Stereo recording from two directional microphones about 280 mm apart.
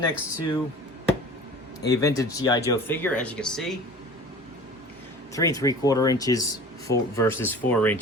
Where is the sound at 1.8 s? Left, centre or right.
Centre.